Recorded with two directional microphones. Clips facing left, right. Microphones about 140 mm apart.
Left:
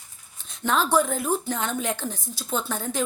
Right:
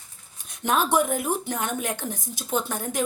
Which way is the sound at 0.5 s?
15° right (ahead or behind).